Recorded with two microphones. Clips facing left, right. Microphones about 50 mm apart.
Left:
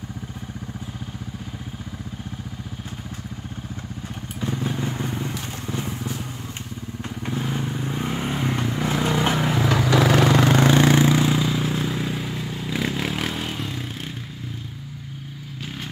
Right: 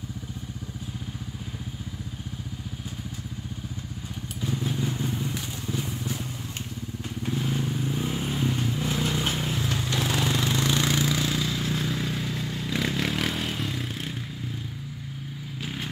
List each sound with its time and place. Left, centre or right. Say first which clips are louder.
4.4 s motorcycle: left 3 dB; left
5.3 s vehicle: left 2 dB; left
7.3 s vehicle: left 2 dB; left
9.4 s vehicle: left 8 dB; left; by 14.1 s centre